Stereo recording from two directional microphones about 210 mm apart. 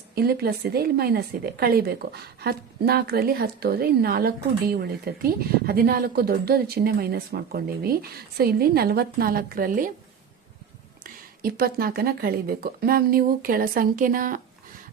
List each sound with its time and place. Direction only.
0.1 s speech: 45° right (ahead or behind)
11.0 s speech: 45° right (ahead or behind)